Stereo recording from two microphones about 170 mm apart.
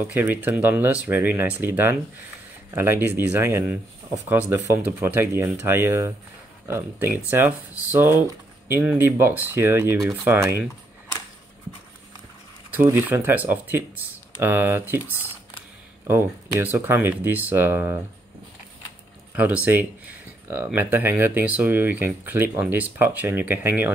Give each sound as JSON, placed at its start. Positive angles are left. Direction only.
{"t": 0.0, "sound": "speech", "side_deg": -10}
{"t": 7.2, "sound": "speech", "side_deg": -10}
{"t": 12.8, "sound": "speech", "side_deg": -15}
{"t": 19.3, "sound": "speech", "side_deg": -10}